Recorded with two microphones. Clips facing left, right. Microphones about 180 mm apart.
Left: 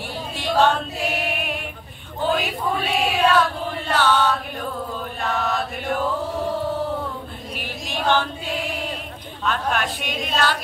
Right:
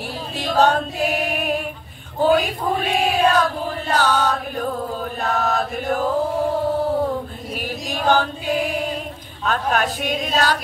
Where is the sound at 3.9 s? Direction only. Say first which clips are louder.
Even; 40° right (ahead or behind).